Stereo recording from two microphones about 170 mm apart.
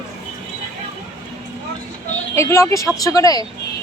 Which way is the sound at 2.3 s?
15° left (ahead or behind).